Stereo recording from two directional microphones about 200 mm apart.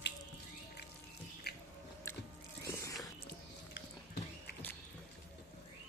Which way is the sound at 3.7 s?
55° left (ahead or behind).